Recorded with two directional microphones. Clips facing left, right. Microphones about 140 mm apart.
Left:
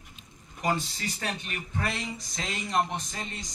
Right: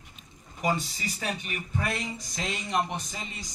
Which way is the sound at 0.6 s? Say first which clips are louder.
Even; 5° right (ahead or behind).